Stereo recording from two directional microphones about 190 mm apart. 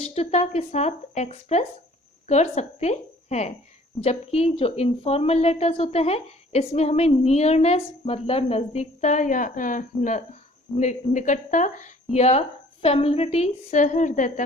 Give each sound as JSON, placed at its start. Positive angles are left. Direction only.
{"t": 0.0, "sound": "a woman's voice", "side_deg": 35}